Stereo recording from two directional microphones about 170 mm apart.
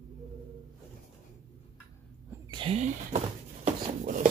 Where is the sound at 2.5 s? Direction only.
30° right (ahead or behind).